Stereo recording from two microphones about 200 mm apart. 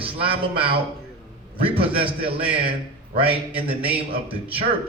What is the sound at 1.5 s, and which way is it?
Speech, 25° right (ahead or behind).